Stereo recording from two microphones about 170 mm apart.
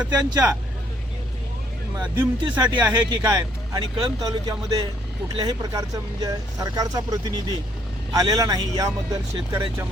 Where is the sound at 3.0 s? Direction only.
25° right (ahead or behind).